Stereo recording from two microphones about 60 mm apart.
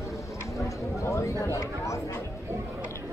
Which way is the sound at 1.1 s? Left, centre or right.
Left.